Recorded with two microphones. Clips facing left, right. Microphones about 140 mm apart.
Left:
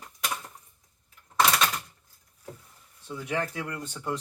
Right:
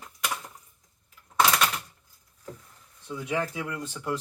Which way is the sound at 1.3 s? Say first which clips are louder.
Right 1 dB; centre (ahead or behind).